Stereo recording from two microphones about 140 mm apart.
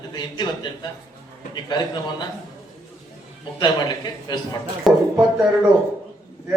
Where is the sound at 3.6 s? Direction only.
30° left (ahead or behind).